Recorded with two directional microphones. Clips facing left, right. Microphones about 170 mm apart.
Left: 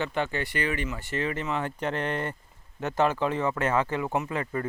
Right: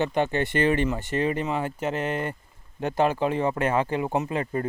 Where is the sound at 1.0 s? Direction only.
20° right (ahead or behind).